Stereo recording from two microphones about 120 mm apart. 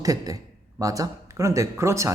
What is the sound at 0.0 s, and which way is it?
A woman's voice, 30° right (ahead or behind).